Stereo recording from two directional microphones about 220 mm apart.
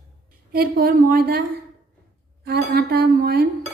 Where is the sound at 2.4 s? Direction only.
45° right (ahead or behind).